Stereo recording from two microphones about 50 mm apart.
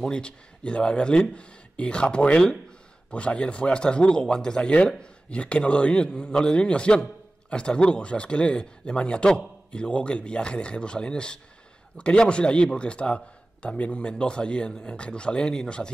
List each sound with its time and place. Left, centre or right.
0.0 s a man's voice: centre